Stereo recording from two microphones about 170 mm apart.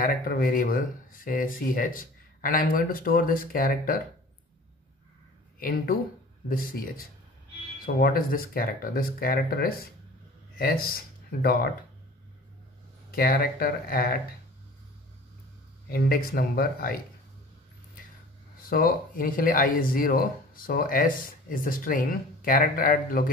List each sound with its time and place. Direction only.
0.0 s speech: 55° left (ahead or behind)
5.6 s speech: 60° left (ahead or behind)
13.1 s speech: 60° left (ahead or behind)
15.9 s speech: 60° left (ahead or behind)
18.7 s speech: 60° left (ahead or behind)